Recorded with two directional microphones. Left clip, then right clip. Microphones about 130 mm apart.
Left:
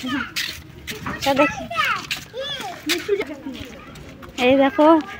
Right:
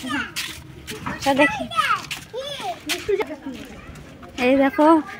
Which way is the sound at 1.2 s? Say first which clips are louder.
Even; 15° right (ahead or behind).